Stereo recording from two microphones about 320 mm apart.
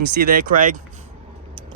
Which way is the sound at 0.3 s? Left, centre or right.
Right.